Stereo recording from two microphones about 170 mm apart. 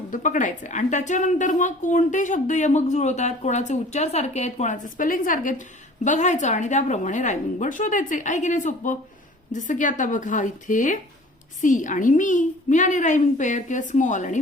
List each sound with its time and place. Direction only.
0.1 s a woman's voice: 50° left (ahead or behind)